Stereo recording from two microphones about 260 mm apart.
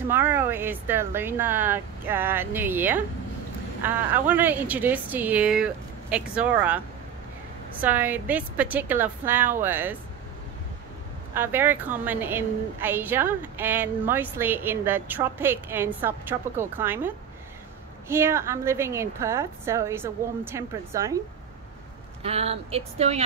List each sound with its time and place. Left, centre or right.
0.1 s a woman's voice: centre
7.8 s a woman's voice: centre
11.3 s a woman's voice: centre
22.2 s speech: right